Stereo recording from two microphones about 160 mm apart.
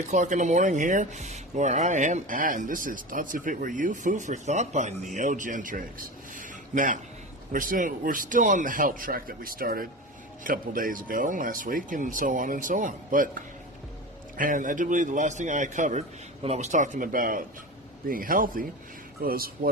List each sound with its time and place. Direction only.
0.1 s speech: 50° right (ahead or behind)
6.3 s a sound: 55° right (ahead or behind)
7.5 s speech: 60° right (ahead or behind)
14.3 s speech: 55° right (ahead or behind)